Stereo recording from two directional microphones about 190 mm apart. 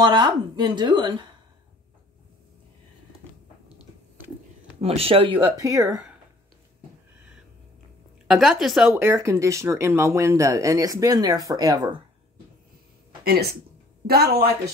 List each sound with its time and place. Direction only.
0.0 s speech: 25° right (ahead or behind)
4.7 s speech: 30° right (ahead or behind)
8.3 s a woman's voice: centre (ahead or behind)
8.9 s speech: 15° right (ahead or behind)
13.2 s speech: 55° right (ahead or behind)